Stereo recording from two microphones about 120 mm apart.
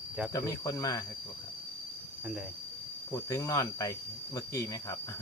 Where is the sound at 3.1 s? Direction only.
30° left (ahead or behind).